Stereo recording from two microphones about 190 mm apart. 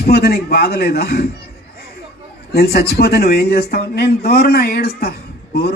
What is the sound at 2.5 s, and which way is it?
Speech, 55° left (ahead or behind).